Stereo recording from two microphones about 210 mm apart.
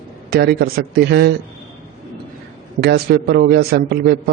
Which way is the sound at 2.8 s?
50° right (ahead or behind).